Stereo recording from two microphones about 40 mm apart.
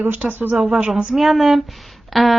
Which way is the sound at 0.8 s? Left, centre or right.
Right.